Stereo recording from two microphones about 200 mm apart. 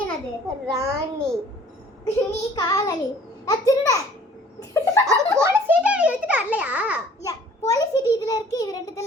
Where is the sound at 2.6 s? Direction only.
20° left (ahead or behind).